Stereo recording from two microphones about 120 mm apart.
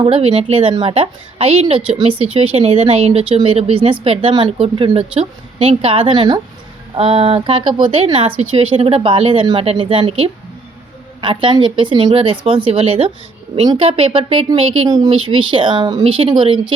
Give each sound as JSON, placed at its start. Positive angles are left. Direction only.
{"t": 0.0, "sound": "a woman's voice", "side_deg": -50}
{"t": 6.9, "sound": "a woman's voice", "side_deg": -50}
{"t": 14.8, "sound": "a woman's voice", "side_deg": -35}